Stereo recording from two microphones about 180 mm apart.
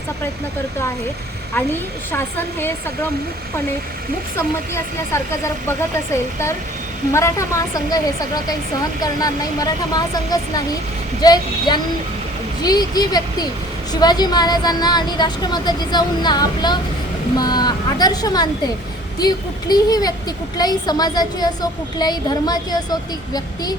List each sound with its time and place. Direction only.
2.1 s a woman's voice: 10° left (ahead or behind)
4.4 s a woman's voice: 15° left (ahead or behind)
7.1 s a woman's voice: 15° left (ahead or behind)